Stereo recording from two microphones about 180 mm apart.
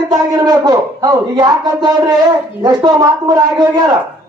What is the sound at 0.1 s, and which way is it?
Speech, 20° right (ahead or behind).